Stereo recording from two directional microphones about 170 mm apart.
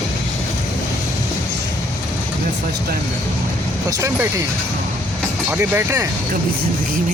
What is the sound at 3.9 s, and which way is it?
Speech, 20° right (ahead or behind).